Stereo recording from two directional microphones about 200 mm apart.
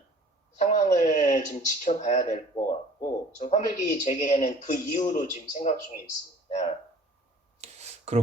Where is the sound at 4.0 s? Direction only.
40° left (ahead or behind).